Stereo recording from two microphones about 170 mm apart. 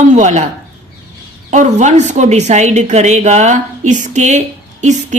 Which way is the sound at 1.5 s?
45° right (ahead or behind).